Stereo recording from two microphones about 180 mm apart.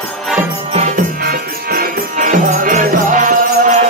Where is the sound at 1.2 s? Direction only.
55° right (ahead or behind).